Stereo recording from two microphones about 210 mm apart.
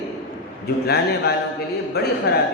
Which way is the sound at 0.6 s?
50° left (ahead or behind).